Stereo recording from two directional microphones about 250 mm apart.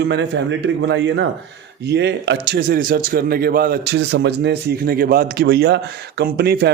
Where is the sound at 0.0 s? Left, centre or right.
Right.